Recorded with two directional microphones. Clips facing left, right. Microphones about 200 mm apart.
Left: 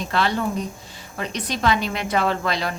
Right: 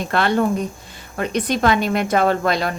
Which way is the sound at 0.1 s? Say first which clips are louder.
Right 5 dB; 55° right (ahead or behind).